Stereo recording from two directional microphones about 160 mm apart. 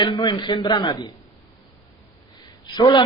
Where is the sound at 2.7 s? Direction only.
25° left (ahead or behind).